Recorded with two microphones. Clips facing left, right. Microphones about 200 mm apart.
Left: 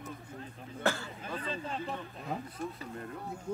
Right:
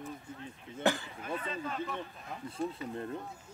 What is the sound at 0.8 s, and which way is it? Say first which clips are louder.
Speech: right 2 dB; 15° right (ahead or behind).